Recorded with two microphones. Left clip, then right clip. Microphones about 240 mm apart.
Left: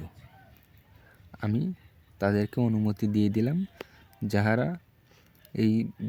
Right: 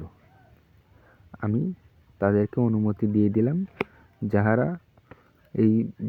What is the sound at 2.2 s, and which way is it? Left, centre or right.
Speech, centre.